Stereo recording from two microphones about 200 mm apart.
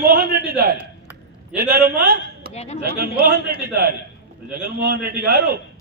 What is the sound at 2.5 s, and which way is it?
Speech, 30° left (ahead or behind).